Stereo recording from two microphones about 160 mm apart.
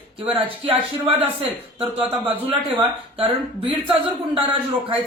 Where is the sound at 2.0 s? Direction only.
35° right (ahead or behind).